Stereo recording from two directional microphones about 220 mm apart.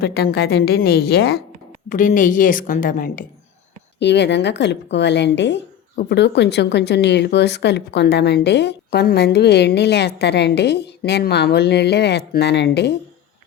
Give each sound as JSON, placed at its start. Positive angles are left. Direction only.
{"t": 0.0, "sound": "a woman's voice", "side_deg": 45}
{"t": 4.0, "sound": "a woman's voice", "side_deg": 50}